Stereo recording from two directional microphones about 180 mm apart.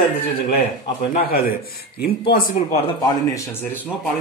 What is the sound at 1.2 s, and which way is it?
A man's voice, 55° left (ahead or behind).